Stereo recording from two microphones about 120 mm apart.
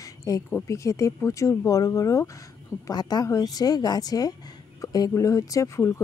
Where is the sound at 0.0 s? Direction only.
30° left (ahead or behind).